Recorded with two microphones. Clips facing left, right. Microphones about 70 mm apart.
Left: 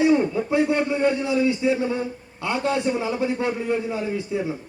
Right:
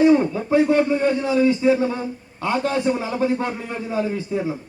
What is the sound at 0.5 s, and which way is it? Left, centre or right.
A man's voice, centre.